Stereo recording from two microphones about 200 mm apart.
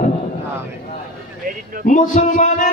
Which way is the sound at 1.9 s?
40° left (ahead or behind).